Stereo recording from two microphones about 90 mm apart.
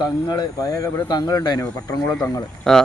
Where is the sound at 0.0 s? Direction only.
50° left (ahead or behind).